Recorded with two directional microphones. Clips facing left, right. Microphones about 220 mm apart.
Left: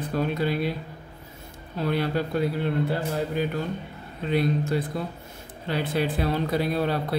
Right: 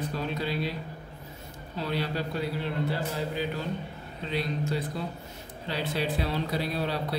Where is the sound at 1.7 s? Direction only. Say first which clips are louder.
Left 5 dB; 50° left (ahead or behind).